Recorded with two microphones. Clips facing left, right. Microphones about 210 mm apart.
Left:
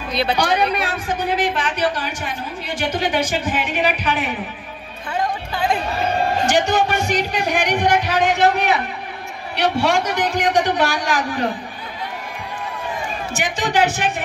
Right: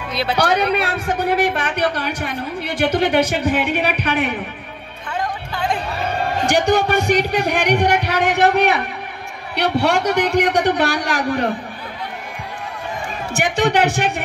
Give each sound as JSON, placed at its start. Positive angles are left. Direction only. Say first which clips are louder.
{"t": 0.1, "sound": "speech", "louder": "left 2 dB", "side_deg": -5}
{"t": 0.4, "sound": "a man's voice", "louder": "right 5 dB", "side_deg": -60}
{"t": 5.5, "sound": "a sound", "louder": "left 1 dB", "side_deg": 5}
{"t": 6.4, "sound": "a man's voice", "louder": "right 4 dB", "side_deg": -60}
{"t": 13.3, "sound": "a man's voice", "louder": "right 6 dB", "side_deg": -60}